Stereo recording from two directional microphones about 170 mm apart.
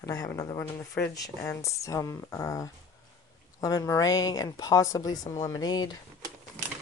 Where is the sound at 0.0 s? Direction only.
20° left (ahead or behind).